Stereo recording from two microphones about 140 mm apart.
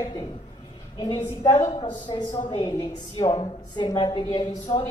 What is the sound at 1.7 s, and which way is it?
A woman's voice, 35° left (ahead or behind).